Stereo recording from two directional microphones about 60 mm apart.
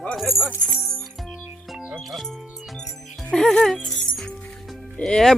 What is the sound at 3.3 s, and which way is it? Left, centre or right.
Speech, centre.